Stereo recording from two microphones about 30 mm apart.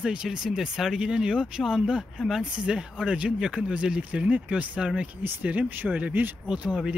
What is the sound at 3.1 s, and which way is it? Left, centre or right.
Speech, right.